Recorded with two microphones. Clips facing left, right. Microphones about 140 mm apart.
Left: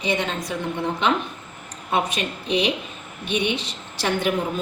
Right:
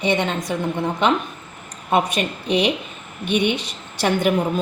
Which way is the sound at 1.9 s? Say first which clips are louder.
Right 4 dB; 55° right (ahead or behind).